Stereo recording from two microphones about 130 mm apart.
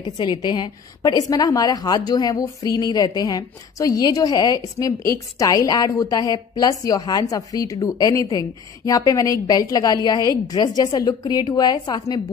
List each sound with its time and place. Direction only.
0.0 s a woman's voice: 35° left (ahead or behind)